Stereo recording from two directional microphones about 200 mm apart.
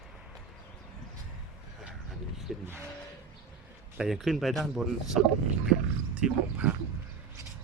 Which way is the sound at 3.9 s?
Centre (ahead or behind).